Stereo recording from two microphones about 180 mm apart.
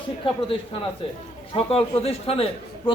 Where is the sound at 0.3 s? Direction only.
30° left (ahead or behind).